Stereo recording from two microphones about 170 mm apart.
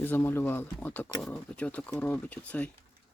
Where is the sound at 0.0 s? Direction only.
10° left (ahead or behind).